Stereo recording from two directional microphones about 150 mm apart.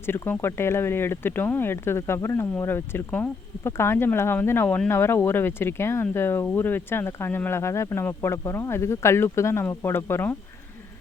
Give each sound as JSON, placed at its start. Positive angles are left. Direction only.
{"t": 0.0, "sound": "speech", "side_deg": 15}